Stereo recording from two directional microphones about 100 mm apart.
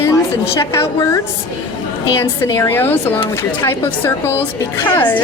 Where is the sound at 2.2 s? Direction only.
30° left (ahead or behind).